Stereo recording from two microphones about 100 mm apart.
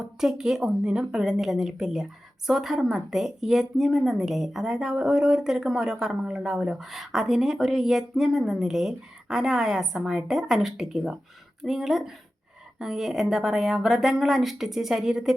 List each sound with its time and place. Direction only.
0.0 s speech: 5° right (ahead or behind)